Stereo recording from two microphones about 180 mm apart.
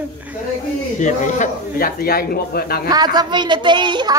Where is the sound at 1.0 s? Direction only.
45° left (ahead or behind).